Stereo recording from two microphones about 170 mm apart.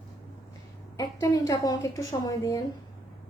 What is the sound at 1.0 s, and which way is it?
A woman's voice, 20° left (ahead or behind).